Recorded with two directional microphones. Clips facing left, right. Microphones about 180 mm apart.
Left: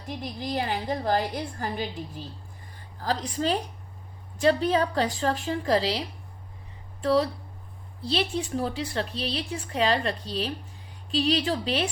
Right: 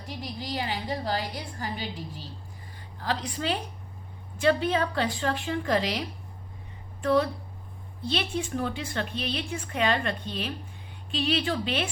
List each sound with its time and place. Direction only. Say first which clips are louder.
0.3 s a woman's voice: left 3 dB; 50° left (ahead or behind)
3.0 s a woman's voice: left 3 dB; 40° left (ahead or behind)